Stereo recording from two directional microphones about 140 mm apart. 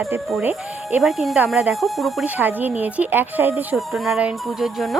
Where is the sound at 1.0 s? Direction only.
Centre (ahead or behind).